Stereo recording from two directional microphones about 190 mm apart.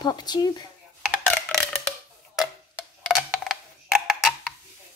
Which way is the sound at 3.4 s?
Centre (ahead or behind).